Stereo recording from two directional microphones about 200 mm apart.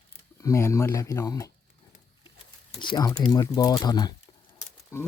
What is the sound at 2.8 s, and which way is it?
Speech, 20° left (ahead or behind).